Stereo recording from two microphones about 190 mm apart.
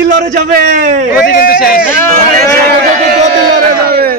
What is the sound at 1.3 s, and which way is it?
Speech, 50° left (ahead or behind).